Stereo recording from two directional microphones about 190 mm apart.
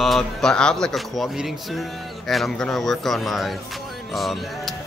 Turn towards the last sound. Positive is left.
turn(degrees=0)  # may be behind; listen again after turning